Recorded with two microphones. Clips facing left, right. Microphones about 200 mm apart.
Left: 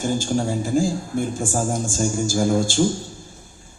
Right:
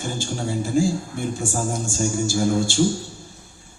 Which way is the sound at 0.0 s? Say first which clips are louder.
Left 6 dB; 50° left (ahead or behind).